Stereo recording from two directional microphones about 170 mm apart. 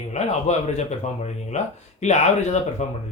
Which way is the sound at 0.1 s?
40° left (ahead or behind).